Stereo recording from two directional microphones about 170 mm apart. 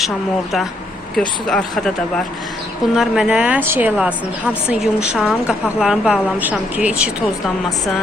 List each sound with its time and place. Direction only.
1.5 s a woman's voice: 5° left (ahead or behind)